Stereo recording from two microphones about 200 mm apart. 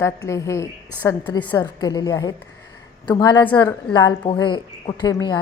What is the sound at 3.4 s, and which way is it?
A woman's voice, 10° left (ahead or behind).